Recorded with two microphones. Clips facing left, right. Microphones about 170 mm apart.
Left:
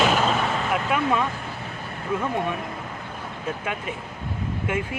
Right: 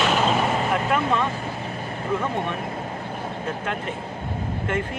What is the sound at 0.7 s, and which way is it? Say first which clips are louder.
Speech: right 1 dB; 5° left (ahead or behind).